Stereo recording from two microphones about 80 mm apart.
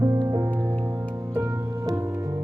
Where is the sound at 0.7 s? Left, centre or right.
Right.